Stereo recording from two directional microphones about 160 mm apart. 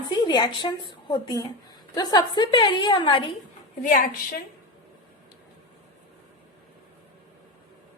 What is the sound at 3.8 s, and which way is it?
Speech, 55° left (ahead or behind).